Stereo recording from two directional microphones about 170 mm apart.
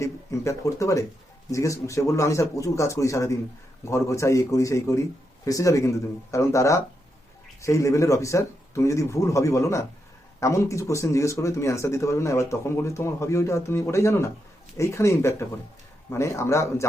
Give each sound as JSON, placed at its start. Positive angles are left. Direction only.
{"t": 0.0, "sound": "speech", "side_deg": 20}